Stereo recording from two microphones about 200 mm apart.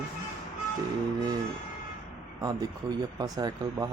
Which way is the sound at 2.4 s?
20° right (ahead or behind).